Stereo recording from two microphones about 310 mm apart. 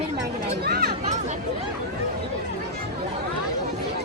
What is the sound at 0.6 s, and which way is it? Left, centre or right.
Speech, right.